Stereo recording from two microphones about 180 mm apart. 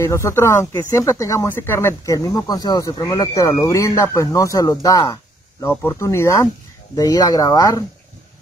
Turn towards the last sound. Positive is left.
turn(degrees=20)  # may be behind; listen again after turning